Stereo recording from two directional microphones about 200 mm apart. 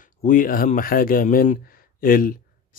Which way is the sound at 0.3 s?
45° left (ahead or behind).